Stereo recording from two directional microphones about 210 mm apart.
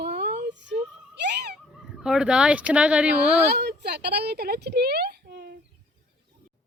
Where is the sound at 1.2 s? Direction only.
55° right (ahead or behind).